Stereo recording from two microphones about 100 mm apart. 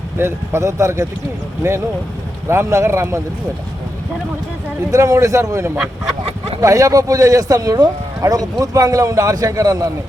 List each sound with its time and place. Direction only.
0.2 s speech: 25° right (ahead or behind)
4.9 s speech: 30° right (ahead or behind)